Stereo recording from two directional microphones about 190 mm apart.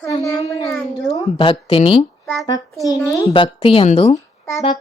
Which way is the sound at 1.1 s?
30° left (ahead or behind).